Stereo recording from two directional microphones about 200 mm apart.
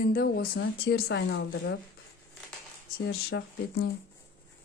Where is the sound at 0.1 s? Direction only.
50° left (ahead or behind).